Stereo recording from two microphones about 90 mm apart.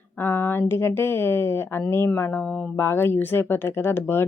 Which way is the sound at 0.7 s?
25° left (ahead or behind).